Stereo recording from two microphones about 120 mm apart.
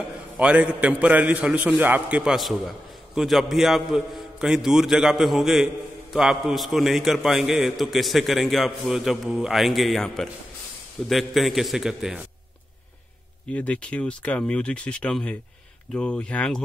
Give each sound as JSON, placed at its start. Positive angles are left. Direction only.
{"t": 0.4, "sound": "a man's voice", "side_deg": -10}
{"t": 13.5, "sound": "speech", "side_deg": 10}